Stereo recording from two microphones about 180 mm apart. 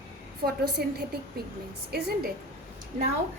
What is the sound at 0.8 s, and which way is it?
Speech, 60° right (ahead or behind).